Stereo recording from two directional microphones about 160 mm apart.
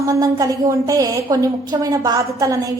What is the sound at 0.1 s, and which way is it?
A woman's voice, 20° right (ahead or behind).